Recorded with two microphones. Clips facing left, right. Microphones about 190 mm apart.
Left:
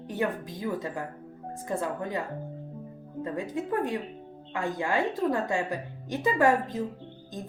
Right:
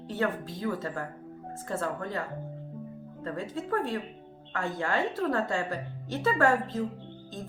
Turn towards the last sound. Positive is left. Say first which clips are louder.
# left 1 dB
turn(degrees=15)  # may be behind; listen again after turning